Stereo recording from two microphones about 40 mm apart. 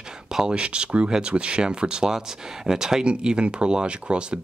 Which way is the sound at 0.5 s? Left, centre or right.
Right.